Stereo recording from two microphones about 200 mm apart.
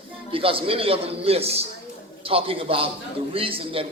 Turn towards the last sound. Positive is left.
turn(degrees=-25)  # may be behind; listen again after turning